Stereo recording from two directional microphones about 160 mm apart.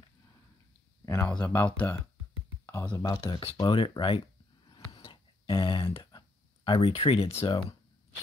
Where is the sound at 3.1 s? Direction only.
30° left (ahead or behind).